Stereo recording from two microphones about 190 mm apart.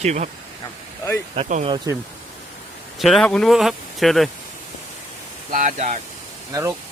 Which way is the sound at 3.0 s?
Centre (ahead or behind).